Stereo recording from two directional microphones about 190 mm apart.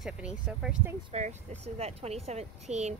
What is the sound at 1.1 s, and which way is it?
Speech, 35° right (ahead or behind).